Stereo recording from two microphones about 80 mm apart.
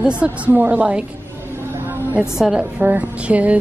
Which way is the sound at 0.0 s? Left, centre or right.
Centre.